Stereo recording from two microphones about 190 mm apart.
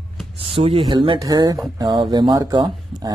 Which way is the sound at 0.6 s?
30° right (ahead or behind).